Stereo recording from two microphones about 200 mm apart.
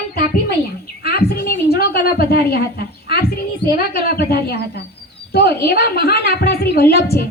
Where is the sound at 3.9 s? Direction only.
50° left (ahead or behind).